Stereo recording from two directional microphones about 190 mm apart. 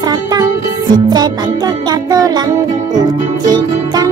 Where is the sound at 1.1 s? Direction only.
20° right (ahead or behind).